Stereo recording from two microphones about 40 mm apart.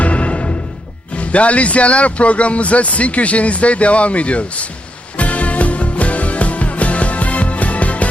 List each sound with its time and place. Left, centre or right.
0.0 s music: left
1.1 s speech: left
5.1 s music: left